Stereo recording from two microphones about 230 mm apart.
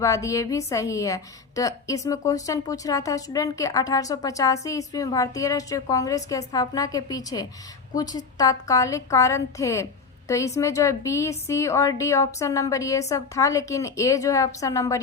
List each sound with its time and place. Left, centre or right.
0.0 s a woman's voice: centre